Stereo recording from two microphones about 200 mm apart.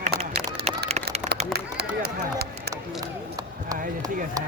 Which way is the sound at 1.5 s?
55° right (ahead or behind).